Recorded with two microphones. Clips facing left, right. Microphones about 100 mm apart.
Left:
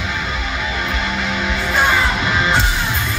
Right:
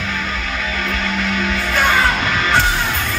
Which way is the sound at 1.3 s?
20° left (ahead or behind).